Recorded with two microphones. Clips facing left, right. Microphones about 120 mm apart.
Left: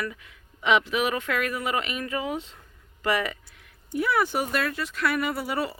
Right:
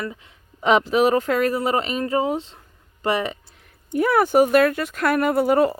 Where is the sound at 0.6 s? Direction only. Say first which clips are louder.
Right 6 dB; 40° right (ahead or behind).